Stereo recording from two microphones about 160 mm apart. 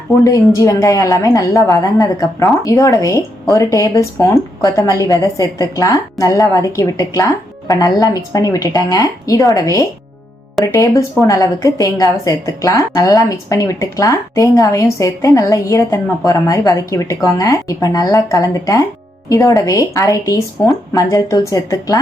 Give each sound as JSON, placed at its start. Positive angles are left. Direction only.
{"t": 0.3, "sound": "a woman's voice", "side_deg": 20}